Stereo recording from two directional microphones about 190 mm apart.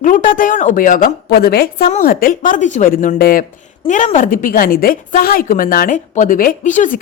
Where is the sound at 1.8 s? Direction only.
40° left (ahead or behind).